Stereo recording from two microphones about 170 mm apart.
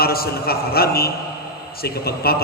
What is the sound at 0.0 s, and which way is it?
Speech, 65° left (ahead or behind).